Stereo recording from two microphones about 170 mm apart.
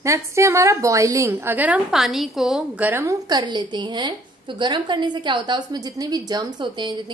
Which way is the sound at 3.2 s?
25° right (ahead or behind).